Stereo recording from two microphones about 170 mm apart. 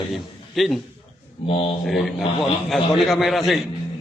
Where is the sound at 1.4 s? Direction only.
35° left (ahead or behind).